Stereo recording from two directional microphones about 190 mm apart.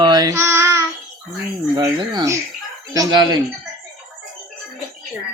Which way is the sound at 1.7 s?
20° right (ahead or behind).